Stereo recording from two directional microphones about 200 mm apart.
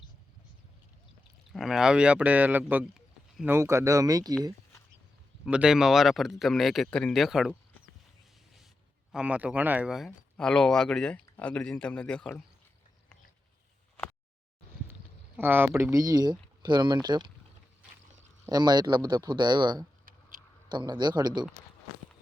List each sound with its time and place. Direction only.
1.5 s speech: centre (ahead or behind); by 4.4 s 20° right (ahead or behind)
5.5 s speech: 5° right (ahead or behind)
9.1 s speech: 5° right (ahead or behind)
15.4 s speech: 10° right (ahead or behind)
18.4 s speech: 20° right (ahead or behind)